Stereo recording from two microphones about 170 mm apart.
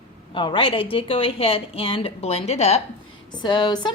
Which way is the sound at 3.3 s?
25° left (ahead or behind).